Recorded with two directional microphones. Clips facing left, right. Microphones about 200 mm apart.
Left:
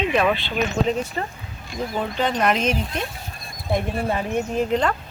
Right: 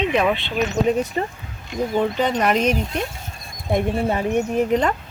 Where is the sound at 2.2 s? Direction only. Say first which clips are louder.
Left 2 dB; 5° right (ahead or behind).